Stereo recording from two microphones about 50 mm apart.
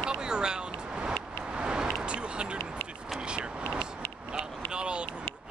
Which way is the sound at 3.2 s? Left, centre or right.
Centre.